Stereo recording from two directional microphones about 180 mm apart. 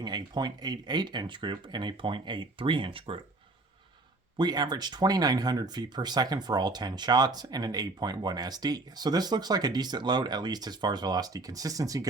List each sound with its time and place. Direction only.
0.0 s speech: 25° right (ahead or behind)
4.4 s speech: 20° right (ahead or behind)